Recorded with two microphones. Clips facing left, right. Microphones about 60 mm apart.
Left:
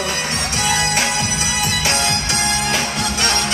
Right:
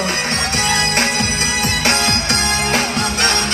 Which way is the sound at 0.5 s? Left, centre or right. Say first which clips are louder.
Even; right.